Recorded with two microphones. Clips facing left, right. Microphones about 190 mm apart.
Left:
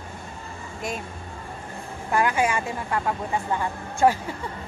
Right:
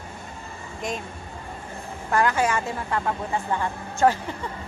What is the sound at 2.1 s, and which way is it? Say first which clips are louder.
Speech: even; 15° left (ahead or behind).